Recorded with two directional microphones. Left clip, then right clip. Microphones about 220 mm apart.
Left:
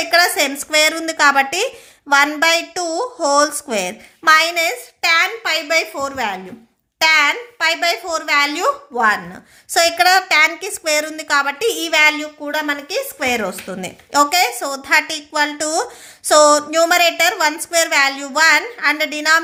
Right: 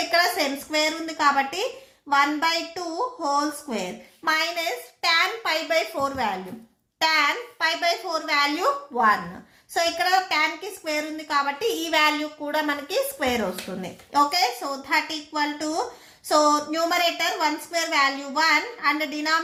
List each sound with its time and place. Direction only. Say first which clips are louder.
0.1 s a woman's voice: left 8 dB; 40° left (ahead or behind)
9.7 s a woman's voice: left 9 dB; 45° left (ahead or behind)